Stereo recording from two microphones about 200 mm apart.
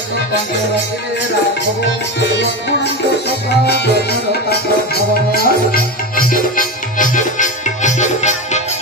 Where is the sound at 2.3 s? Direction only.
55° left (ahead or behind).